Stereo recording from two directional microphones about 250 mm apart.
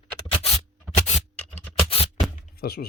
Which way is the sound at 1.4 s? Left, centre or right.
Centre.